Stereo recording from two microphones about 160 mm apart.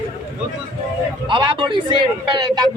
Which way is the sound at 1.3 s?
30° right (ahead or behind).